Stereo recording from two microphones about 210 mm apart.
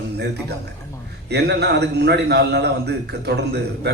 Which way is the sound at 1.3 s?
50° right (ahead or behind).